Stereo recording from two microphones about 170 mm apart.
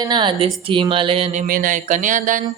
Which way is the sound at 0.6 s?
30° right (ahead or behind).